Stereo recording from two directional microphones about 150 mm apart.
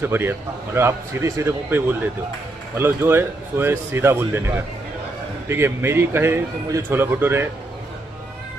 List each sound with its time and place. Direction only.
0.0 s a man's voice: 15° right (ahead or behind)